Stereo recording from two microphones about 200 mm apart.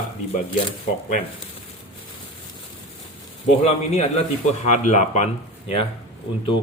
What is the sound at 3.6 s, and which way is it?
Speech, 35° left (ahead or behind).